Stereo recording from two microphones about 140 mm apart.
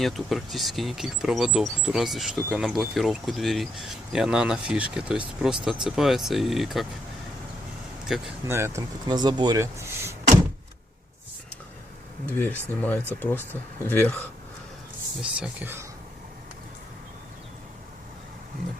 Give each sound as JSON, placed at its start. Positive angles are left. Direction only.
{"t": 0.0, "sound": "speech", "side_deg": 0}
{"t": 8.0, "sound": "speech", "side_deg": -5}
{"t": 8.4, "sound": "speech", "side_deg": -20}
{"t": 12.2, "sound": "speech", "side_deg": 15}
{"t": 15.2, "sound": "speech", "side_deg": -10}